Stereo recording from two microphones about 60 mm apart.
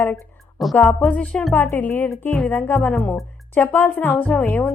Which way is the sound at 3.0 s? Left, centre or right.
Left.